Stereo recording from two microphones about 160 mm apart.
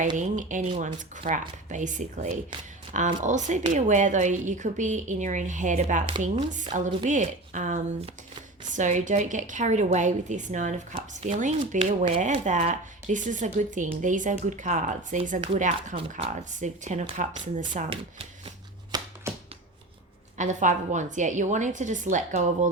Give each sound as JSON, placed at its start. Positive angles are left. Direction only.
{"t": 0.2, "sound": "speech", "side_deg": -50}
{"t": 17.8, "sound": "speech", "side_deg": -35}
{"t": 18.9, "sound": "a sound", "side_deg": -25}
{"t": 20.4, "sound": "speech", "side_deg": -50}